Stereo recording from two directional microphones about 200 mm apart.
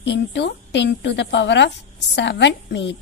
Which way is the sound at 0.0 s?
60° left (ahead or behind).